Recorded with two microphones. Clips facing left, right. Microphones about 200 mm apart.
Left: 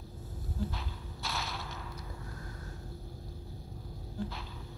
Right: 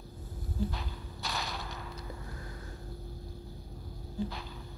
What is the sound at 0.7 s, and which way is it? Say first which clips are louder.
Whip: right 2 dB; centre (ahead or behind).